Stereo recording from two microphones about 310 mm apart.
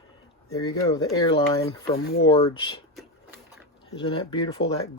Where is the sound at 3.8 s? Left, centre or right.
Centre.